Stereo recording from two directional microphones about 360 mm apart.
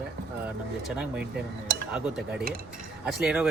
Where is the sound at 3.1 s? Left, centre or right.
Centre.